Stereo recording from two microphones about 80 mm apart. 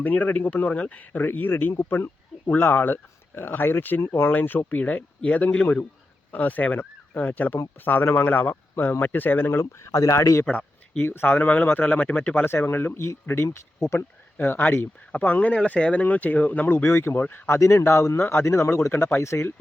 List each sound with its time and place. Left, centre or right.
0.0 s speech: left
10.4 s speech: centre; by 19.5 s left